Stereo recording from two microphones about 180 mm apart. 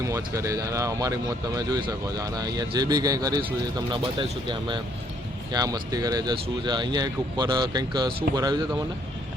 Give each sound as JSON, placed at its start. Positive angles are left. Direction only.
{"t": 0.0, "sound": "speech", "side_deg": -15}